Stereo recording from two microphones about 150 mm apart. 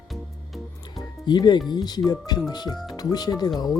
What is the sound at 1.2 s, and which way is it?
Speech, 30° left (ahead or behind).